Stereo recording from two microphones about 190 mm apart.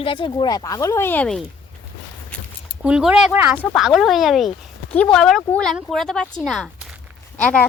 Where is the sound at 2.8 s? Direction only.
5° right (ahead or behind).